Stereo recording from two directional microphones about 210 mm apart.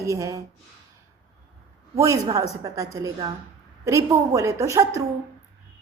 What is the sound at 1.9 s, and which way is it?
A woman's voice, 15° right (ahead or behind).